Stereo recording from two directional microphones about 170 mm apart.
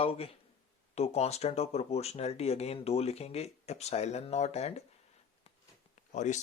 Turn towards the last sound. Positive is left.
turn(degrees=45)  # may be behind; listen again after turning